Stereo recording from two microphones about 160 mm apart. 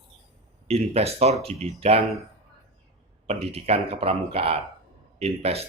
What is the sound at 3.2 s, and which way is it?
Speech, 40° right (ahead or behind).